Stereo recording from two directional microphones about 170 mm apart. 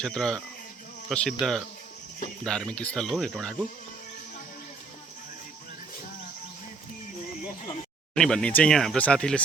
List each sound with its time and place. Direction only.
0.0 s speech: 5° left (ahead or behind)
8.1 s speech: 5° left (ahead or behind)